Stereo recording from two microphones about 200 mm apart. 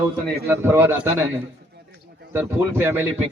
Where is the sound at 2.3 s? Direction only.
10° right (ahead or behind).